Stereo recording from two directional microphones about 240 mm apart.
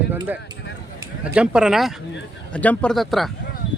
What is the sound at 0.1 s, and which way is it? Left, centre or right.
A man's voice, centre.